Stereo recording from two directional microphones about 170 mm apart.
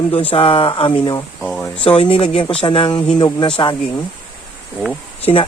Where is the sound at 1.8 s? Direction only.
30° left (ahead or behind).